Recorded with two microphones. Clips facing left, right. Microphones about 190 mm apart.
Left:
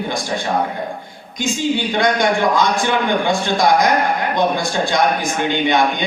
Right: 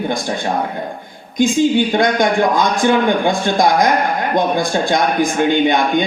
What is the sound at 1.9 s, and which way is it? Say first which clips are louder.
A man's voice: right 2 dB; 50° right (ahead or behind).